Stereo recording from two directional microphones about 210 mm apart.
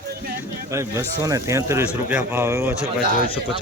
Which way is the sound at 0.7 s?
15° right (ahead or behind).